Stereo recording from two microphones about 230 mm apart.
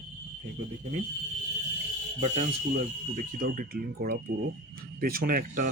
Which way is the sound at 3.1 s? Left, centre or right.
Right.